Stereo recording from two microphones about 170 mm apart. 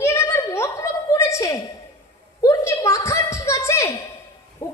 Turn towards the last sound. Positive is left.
turn(degrees=15)  # may be behind; listen again after turning